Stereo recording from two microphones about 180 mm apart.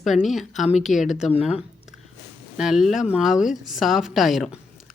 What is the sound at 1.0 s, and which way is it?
Speech, 40° left (ahead or behind).